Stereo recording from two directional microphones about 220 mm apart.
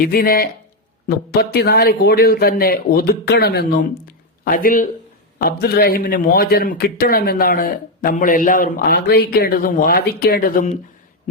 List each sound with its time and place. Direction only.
0.0 s a man's voice: 40° left (ahead or behind)